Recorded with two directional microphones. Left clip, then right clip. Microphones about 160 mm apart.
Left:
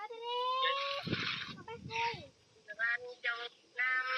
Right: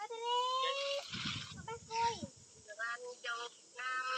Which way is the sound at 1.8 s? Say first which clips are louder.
Right 1 dB; 25° right (ahead or behind).